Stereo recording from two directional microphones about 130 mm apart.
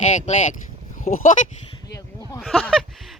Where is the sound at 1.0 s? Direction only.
85° left.